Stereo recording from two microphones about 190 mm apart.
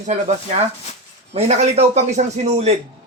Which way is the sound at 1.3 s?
35° right (ahead or behind).